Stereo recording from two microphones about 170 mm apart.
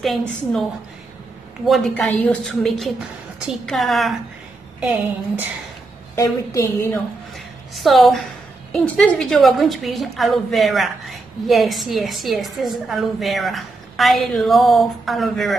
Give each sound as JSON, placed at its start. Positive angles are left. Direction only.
{"t": 0.0, "sound": "a woman's voice", "side_deg": 0}
{"t": 1.7, "sound": "a woman's voice", "side_deg": 5}
{"t": 6.1, "sound": "a woman's voice", "side_deg": 15}
{"t": 6.9, "sound": "a woman's voice", "side_deg": 0}